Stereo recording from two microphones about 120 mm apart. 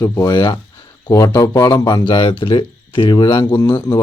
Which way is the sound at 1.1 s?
30° left (ahead or behind).